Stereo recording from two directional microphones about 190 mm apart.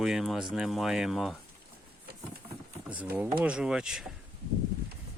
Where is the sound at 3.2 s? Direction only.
5° right (ahead or behind).